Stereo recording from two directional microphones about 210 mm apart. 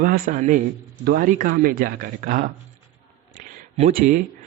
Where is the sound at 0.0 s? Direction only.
40° right (ahead or behind).